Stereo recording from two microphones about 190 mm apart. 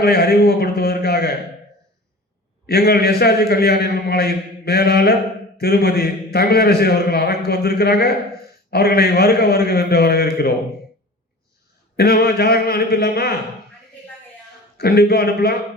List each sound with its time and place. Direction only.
0.0 s a sound: 55° left (ahead or behind)
2.6 s a man's voice: 55° left (ahead or behind)
11.9 s a man's voice: 55° left (ahead or behind)
14.8 s a man's voice: 55° left (ahead or behind)